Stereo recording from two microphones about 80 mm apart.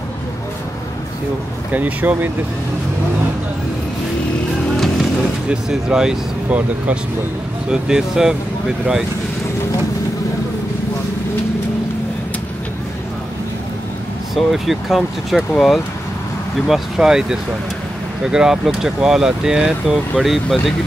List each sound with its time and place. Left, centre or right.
1.7 s speech: right
4.7 s music: centre
5.5 s speech: centre
7.7 s speech: centre
14.3 s speech: centre